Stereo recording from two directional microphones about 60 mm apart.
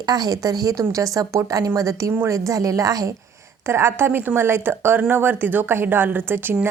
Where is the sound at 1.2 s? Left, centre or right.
Right.